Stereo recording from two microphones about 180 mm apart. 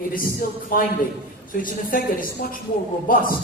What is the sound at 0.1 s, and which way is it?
Speech, 50° left (ahead or behind).